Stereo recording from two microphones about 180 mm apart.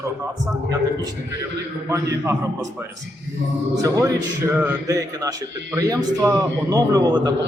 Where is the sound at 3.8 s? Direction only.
15° right (ahead or behind).